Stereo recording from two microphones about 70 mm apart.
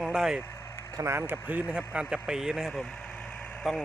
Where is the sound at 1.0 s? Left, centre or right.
Right; by 3.8 s centre.